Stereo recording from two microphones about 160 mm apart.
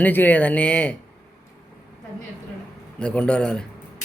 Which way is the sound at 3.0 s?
10° left (ahead or behind).